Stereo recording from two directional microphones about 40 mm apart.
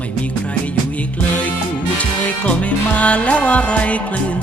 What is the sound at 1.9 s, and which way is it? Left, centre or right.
Music, left.